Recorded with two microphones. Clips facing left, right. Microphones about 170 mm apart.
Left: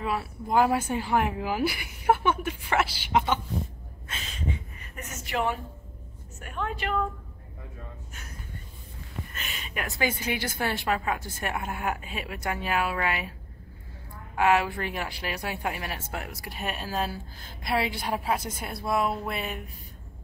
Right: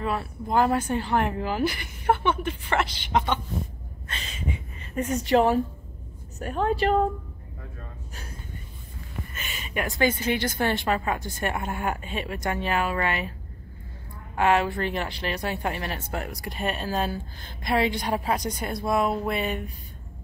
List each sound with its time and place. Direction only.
0.0 s speech: 10° left (ahead or behind)
4.1 s a sound: centre (ahead or behind)
4.9 s a woman's voice: 35° right (ahead or behind)
9.3 s speech: centre (ahead or behind)
14.3 s speech: 5° left (ahead or behind)